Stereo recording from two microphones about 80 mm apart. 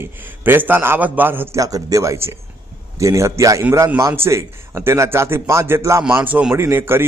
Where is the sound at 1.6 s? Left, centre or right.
Right.